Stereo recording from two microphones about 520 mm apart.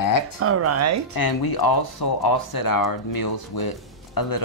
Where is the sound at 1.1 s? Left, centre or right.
Left.